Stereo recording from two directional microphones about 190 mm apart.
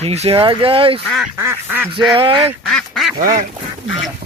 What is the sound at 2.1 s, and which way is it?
Speech, 25° right (ahead or behind).